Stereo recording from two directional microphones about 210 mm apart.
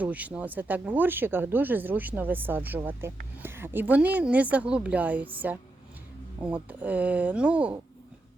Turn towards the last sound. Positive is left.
turn(degrees=-5)  # may be behind; listen again after turning